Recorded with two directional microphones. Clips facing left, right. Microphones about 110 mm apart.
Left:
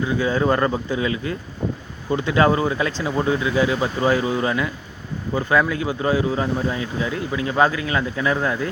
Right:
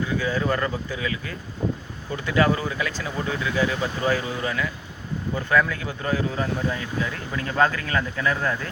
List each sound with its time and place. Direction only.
0.2 s speech: 25° left (ahead or behind)